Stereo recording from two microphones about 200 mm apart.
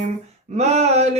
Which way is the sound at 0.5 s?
35° right (ahead or behind).